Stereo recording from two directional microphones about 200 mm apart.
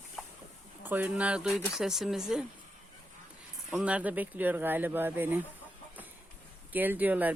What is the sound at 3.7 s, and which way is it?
Speech, 5° right (ahead or behind).